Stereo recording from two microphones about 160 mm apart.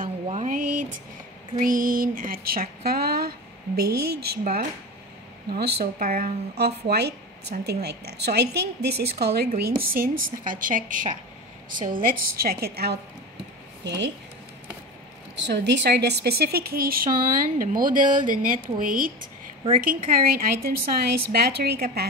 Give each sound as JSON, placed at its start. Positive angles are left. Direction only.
{"t": 0.0, "sound": "a sound", "side_deg": -50}
{"t": 1.6, "sound": "speech", "side_deg": -60}
{"t": 5.5, "sound": "a woman's voice", "side_deg": -90}
{"t": 9.6, "sound": "a woman's voice", "side_deg": -65}
{"t": 15.3, "sound": "a woman's voice", "side_deg": -90}
{"t": 17.6, "sound": "a woman's voice", "side_deg": -55}
{"t": 21.3, "sound": "speech", "side_deg": -85}